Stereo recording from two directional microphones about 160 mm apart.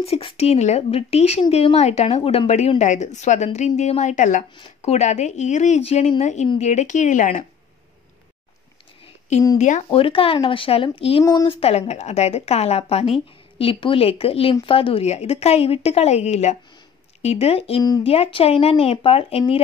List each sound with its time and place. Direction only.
0.0 s a woman's voice: 35° left (ahead or behind)
9.6 s a woman's voice: 45° left (ahead or behind)
9.8 s speech: 35° left (ahead or behind)
17.8 s speech: 25° left (ahead or behind)
18.1 s speech: 40° left (ahead or behind)